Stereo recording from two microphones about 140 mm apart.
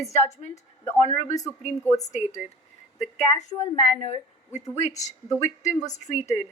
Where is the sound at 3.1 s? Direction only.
55° left (ahead or behind).